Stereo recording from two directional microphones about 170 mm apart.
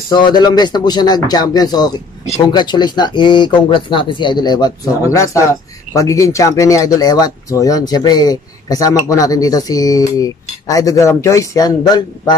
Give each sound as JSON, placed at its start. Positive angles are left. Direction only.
{"t": 0.1, "sound": "speech", "side_deg": 25}